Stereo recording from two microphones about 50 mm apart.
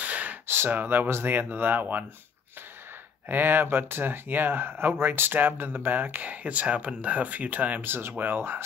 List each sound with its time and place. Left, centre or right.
0.0 s gasp: right
0.7 s speech: right
3.3 s speech: right
7.8 s speech: right